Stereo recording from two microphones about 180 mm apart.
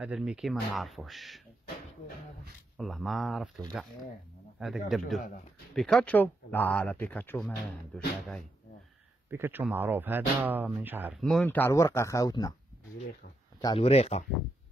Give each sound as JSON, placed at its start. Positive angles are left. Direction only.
{"t": 0.0, "sound": "speech", "side_deg": -5}
{"t": 2.8, "sound": "speech", "side_deg": 0}
{"t": 9.3, "sound": "speech", "side_deg": -10}
{"t": 11.1, "sound": "speech", "side_deg": 0}
{"t": 13.7, "sound": "speech", "side_deg": 35}